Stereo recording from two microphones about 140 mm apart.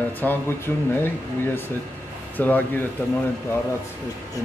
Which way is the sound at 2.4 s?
10° left (ahead or behind).